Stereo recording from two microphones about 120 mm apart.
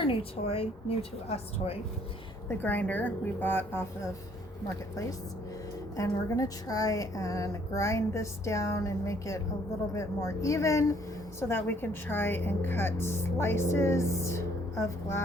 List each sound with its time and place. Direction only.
0.1 s speech: 55° left (ahead or behind)
2.5 s a woman's voice: 15° left (ahead or behind)
6.0 s a woman's voice: 25° left (ahead or behind)